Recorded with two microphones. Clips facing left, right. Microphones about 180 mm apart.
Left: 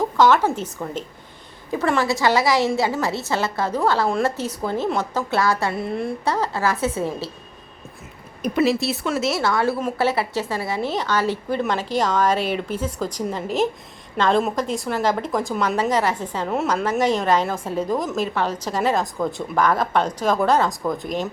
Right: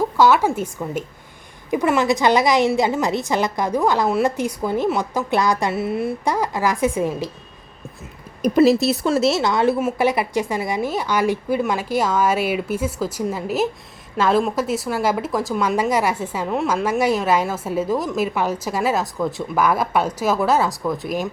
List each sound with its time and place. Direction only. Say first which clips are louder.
0.0 s a woman's voice: right 1 dB; 10° right (ahead or behind)
5.7 s a woman's voice: right 3 dB; 5° right (ahead or behind)
8.4 s speech: right 5 dB; 40° right (ahead or behind)
9.4 s a woman's voice: right 3 dB; 20° right (ahead or behind)